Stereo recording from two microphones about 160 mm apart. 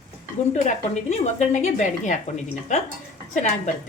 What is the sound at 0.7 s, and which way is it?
Stir, 45° left (ahead or behind).